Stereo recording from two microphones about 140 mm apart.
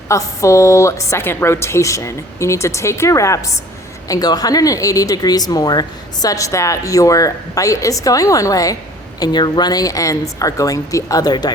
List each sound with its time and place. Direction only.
0.1 s speech: 20° left (ahead or behind)